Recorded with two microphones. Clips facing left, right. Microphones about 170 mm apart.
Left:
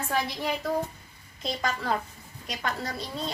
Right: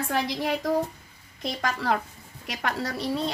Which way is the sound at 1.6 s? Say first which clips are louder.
Right 3 dB; 70° right (ahead or behind).